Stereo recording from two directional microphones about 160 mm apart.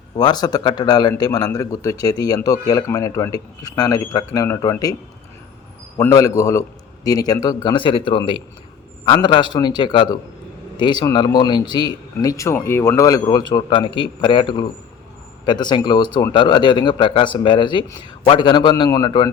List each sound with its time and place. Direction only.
0.2 s speech: 25° left (ahead or behind)
6.0 s speech: 20° left (ahead or behind)